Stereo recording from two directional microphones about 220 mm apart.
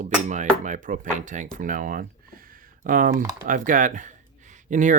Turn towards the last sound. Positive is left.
turn(degrees=-35)  # may be behind; listen again after turning